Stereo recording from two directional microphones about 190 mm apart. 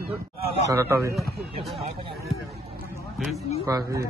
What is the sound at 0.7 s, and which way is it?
Speech, 15° right (ahead or behind).